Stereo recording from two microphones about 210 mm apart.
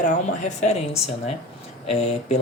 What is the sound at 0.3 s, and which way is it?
Mantra, 35° left (ahead or behind).